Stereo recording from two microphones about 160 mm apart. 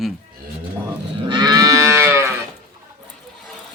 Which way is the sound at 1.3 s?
25° right (ahead or behind).